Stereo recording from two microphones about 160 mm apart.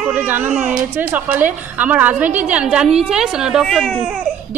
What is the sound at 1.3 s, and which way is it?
A woman's voice, 10° right (ahead or behind).